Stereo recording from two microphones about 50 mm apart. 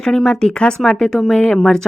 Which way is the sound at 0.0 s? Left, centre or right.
Centre.